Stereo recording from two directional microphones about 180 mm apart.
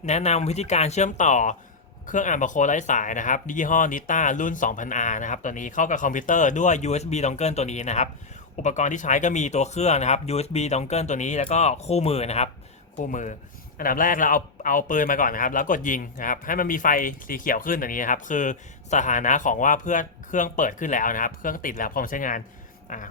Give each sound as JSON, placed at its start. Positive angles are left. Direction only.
{"t": 0.0, "sound": "speech", "side_deg": 40}